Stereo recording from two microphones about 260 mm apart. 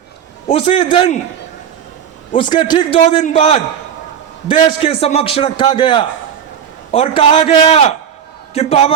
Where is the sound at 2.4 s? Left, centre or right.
Centre.